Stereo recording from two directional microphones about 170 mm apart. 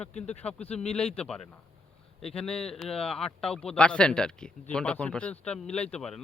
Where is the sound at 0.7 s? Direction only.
5° left (ahead or behind).